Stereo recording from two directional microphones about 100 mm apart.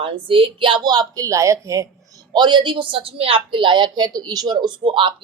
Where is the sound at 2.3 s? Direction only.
50° right (ahead or behind).